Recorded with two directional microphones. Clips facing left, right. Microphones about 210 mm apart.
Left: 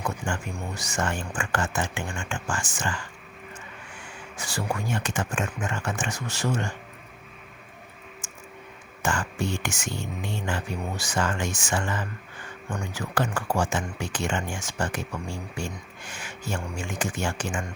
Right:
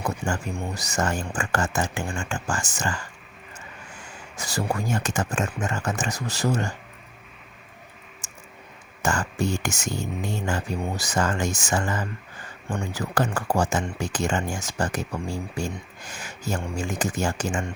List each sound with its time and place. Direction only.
0.0 s speech: 40° right (ahead or behind)
4.4 s speech: 40° right (ahead or behind)
8.2 s a sound: 35° right (ahead or behind)
9.0 s speech: 40° right (ahead or behind)